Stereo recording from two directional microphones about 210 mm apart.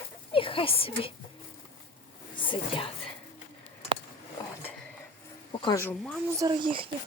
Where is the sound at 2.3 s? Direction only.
25° left (ahead or behind).